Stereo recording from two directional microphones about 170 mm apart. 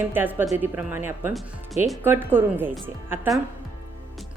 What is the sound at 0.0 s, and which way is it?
A woman's voice, 10° right (ahead or behind).